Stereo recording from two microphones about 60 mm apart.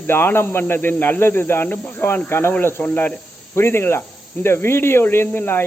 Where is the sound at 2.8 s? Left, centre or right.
Left.